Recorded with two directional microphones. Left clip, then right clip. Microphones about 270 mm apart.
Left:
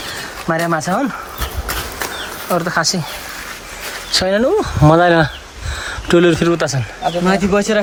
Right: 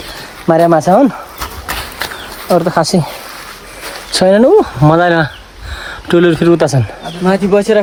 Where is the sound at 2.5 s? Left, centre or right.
Centre.